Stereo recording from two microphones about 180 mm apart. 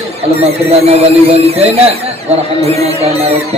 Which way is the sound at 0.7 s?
35° right (ahead or behind).